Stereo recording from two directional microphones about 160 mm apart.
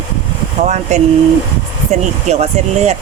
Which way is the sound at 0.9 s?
45° right (ahead or behind).